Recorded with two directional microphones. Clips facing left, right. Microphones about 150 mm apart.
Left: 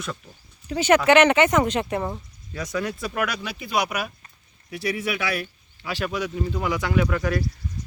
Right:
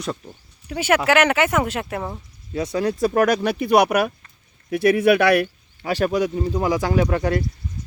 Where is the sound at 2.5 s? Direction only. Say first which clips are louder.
Right 6 dB; 30° right (ahead or behind).